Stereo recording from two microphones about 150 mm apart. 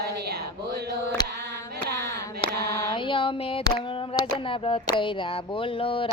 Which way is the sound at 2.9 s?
35° left (ahead or behind).